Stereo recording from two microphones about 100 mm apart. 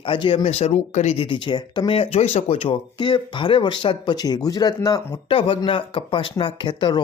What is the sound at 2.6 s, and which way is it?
Speech, 55° left (ahead or behind).